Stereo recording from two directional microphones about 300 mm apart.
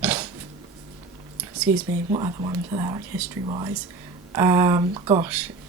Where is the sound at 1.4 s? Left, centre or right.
Centre.